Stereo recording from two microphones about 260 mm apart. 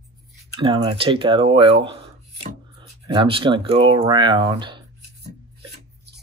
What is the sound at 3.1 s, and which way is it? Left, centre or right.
Speech, centre.